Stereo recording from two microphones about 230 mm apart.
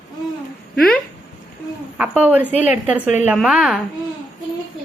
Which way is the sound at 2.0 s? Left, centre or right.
Centre.